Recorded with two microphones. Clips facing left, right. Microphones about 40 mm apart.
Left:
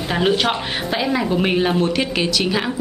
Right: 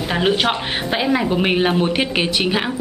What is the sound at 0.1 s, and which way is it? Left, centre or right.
A woman's voice, centre.